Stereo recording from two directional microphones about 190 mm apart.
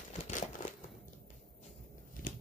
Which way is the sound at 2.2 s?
45° left (ahead or behind).